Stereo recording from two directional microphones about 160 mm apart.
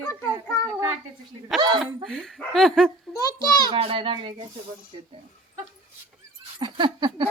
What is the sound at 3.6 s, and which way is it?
Speech, 35° right (ahead or behind).